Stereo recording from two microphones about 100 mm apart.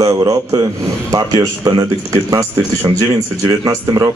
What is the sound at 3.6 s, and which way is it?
Speech, 35° right (ahead or behind).